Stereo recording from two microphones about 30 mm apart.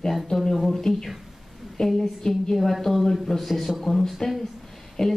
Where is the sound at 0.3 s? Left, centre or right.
Centre.